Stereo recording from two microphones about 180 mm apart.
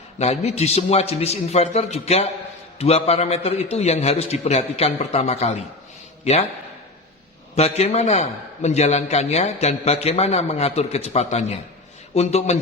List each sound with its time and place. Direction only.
0.2 s a man's voice: 35° left (ahead or behind)
7.5 s a man's voice: 35° left (ahead or behind)